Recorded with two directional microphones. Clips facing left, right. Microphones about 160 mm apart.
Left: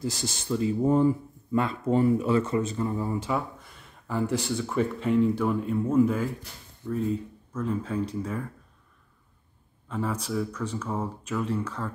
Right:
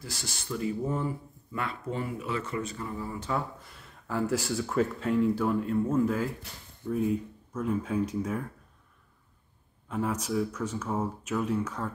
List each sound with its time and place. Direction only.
0.0 s speech: 20° left (ahead or behind)
3.2 s speech: 5° left (ahead or behind)
6.8 s speech: 10° right (ahead or behind)
9.8 s speech: 10° right (ahead or behind)